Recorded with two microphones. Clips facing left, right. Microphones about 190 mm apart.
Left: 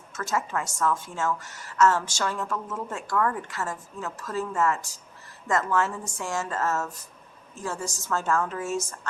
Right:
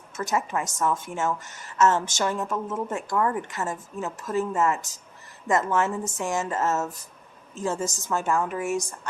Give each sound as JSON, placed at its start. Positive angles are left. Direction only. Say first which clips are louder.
{"t": 0.1, "sound": "a woman's voice", "louder": "right 2 dB", "side_deg": -20}